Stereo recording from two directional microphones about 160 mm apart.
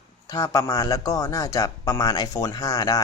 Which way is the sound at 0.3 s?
25° left (ahead or behind).